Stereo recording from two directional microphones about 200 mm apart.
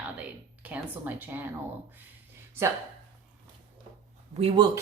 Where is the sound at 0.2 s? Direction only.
5° right (ahead or behind).